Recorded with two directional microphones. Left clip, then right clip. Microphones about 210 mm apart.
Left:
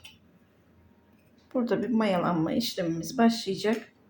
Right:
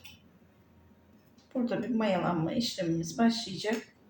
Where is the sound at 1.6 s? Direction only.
50° left (ahead or behind).